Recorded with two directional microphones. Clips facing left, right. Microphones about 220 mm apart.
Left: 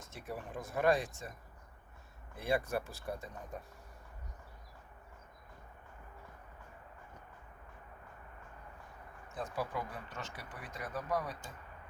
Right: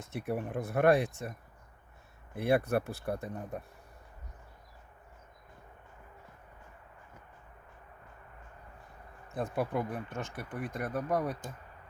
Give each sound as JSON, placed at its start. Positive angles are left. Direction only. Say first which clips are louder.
{"t": 0.0, "sound": "speech", "louder": "right 9 dB", "side_deg": -60}
{"t": 2.3, "sound": "speech", "louder": "right 6 dB", "side_deg": -60}
{"t": 9.3, "sound": "speech", "louder": "right 6 dB", "side_deg": -55}